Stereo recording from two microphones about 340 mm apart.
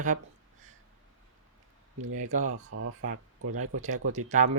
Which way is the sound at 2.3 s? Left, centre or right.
Right.